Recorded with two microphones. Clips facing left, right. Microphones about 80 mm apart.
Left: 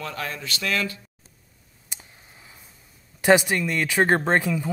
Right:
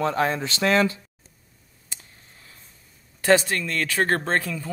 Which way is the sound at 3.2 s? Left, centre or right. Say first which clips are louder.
Left 1 dB; centre.